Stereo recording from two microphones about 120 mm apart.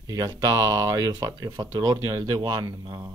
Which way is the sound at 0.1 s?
30° right (ahead or behind).